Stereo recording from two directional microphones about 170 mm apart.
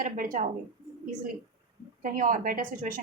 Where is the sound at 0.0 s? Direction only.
50° right (ahead or behind).